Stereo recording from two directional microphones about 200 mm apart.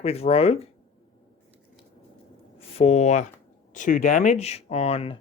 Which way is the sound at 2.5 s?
30° left (ahead or behind).